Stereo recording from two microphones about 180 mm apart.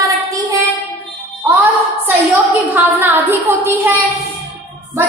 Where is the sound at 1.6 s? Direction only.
10° right (ahead or behind).